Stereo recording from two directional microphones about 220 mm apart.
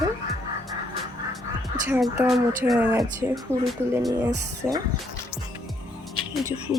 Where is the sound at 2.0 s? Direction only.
Centre (ahead or behind).